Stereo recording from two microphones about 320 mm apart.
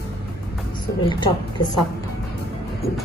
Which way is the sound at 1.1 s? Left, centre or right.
Centre.